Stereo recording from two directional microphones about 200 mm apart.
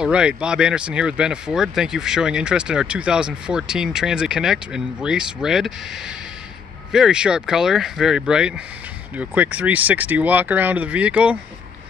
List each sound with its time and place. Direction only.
0.0 s speech: 5° right (ahead or behind)